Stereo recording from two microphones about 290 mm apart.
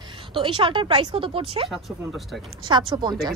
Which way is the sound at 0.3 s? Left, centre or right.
Centre.